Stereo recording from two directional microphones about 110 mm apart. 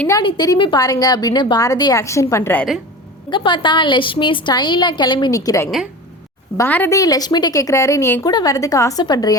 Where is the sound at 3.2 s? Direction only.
45° left (ahead or behind).